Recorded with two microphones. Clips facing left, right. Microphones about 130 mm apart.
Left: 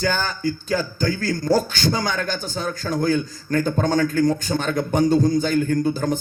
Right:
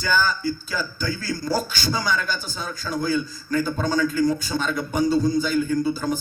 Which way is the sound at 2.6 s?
50° left (ahead or behind).